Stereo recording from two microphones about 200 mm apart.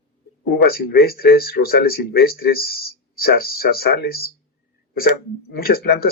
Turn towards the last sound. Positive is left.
turn(degrees=50)  # may be behind; listen again after turning